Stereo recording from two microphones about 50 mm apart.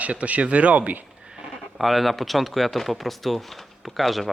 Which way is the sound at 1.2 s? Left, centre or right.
Centre.